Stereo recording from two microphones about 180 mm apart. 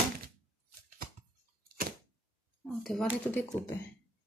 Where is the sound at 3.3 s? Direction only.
10° left (ahead or behind).